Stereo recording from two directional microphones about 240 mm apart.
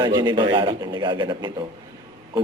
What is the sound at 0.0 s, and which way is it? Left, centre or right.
A man's voice, centre.